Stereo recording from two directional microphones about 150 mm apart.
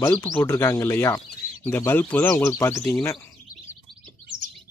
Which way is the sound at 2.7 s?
Centre (ahead or behind).